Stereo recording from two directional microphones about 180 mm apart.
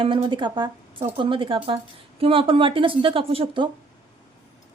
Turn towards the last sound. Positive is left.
turn(degrees=-30)  # may be behind; listen again after turning